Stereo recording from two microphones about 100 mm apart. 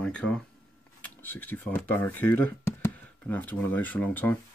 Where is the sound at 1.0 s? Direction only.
20° left (ahead or behind).